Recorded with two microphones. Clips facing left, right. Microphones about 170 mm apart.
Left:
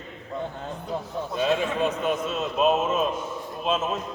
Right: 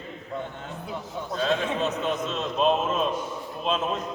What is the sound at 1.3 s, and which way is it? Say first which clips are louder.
A man's voice: left 1 dB; 15° left (ahead or behind).